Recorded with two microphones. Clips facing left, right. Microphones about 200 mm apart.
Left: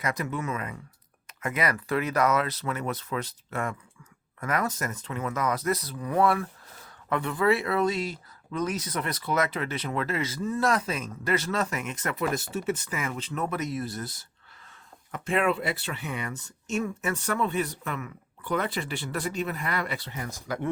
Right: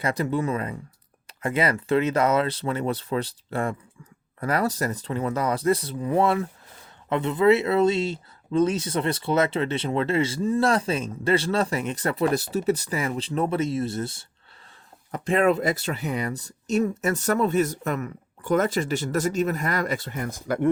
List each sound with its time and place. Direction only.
0.0 s speech: 30° right (ahead or behind); by 20.7 s 55° right (ahead or behind)